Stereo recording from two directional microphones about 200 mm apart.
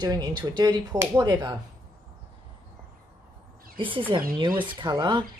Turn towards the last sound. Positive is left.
turn(degrees=-20)  # may be behind; listen again after turning